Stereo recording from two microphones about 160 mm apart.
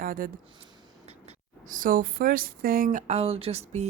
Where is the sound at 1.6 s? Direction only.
55° right (ahead or behind).